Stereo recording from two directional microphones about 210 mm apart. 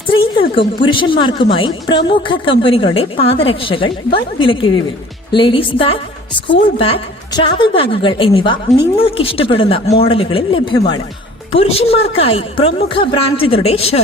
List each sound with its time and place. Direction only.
0.5 s a woman's voice: 25° left (ahead or behind)